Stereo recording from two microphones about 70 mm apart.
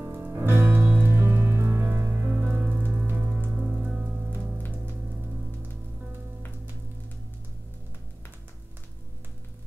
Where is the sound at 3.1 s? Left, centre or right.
Centre.